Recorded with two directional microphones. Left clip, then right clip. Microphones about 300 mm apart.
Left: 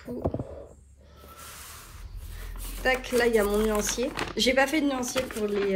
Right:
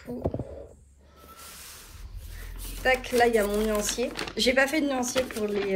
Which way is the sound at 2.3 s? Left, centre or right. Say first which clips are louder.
Even; centre.